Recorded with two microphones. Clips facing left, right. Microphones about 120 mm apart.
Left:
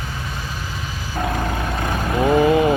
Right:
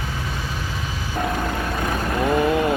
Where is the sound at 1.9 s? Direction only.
15° left (ahead or behind).